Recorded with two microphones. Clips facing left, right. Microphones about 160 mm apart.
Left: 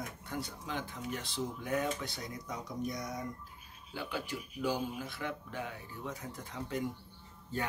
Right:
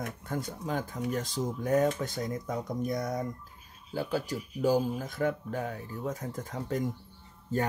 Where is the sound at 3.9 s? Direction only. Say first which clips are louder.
Right 7 dB; 40° right (ahead or behind).